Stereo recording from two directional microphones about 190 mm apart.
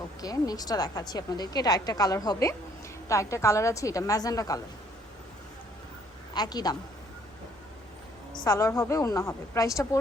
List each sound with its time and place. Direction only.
0.2 s a woman's voice: 20° left (ahead or behind)
6.3 s a woman's voice: 20° left (ahead or behind)
8.4 s a woman's voice: 15° left (ahead or behind)